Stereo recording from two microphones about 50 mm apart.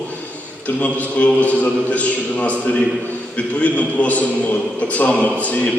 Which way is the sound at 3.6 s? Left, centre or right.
Left.